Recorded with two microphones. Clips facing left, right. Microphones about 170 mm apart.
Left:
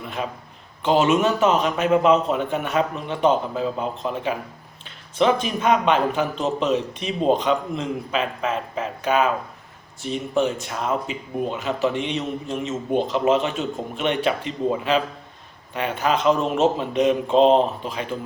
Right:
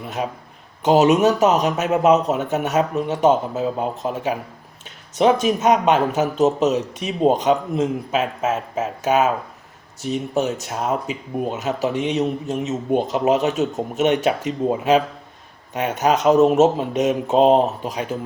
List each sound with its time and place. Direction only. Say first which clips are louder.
0.8 s speech: right 4 dB; 40° right (ahead or behind)